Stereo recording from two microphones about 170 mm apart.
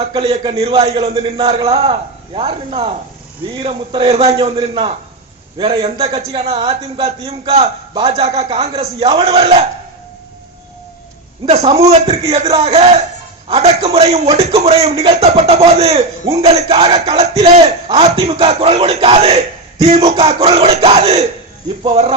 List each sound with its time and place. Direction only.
0.1 s a man's voice: 30° right (ahead or behind)
11.4 s a man's voice: 35° right (ahead or behind)